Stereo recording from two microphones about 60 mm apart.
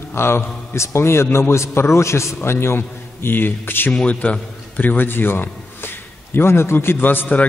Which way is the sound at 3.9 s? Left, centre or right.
Left.